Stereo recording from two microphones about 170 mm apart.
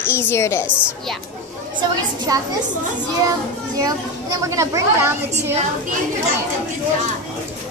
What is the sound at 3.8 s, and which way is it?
Speech, 20° right (ahead or behind).